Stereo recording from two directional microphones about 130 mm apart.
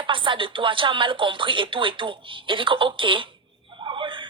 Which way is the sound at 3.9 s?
40° right (ahead or behind).